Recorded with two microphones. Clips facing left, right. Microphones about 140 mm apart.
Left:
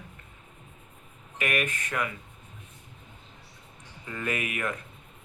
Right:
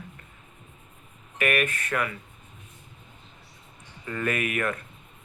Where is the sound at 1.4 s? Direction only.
15° left (ahead or behind).